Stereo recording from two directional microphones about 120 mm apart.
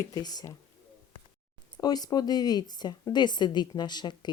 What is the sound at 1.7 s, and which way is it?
Speech, 35° left (ahead or behind).